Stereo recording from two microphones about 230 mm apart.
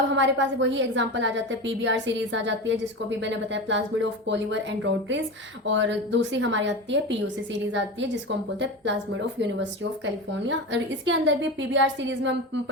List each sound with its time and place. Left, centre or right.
0.2 s a woman's voice: right
10.4 s a woman's voice: right